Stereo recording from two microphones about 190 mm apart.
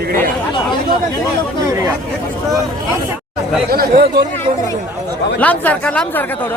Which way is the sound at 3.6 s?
55° right (ahead or behind).